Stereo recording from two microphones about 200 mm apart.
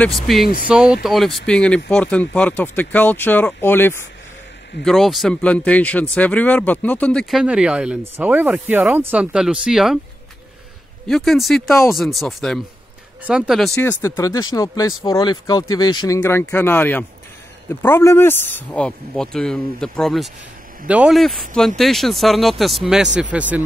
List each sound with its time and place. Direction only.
0.0 s speech: centre (ahead or behind)
4.8 s speech: centre (ahead or behind)
11.1 s speech: centre (ahead or behind)